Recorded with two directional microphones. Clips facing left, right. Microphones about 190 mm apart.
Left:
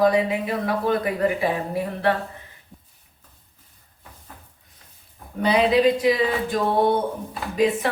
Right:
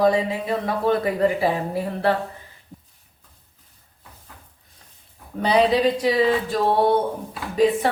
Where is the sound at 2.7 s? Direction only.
Centre (ahead or behind).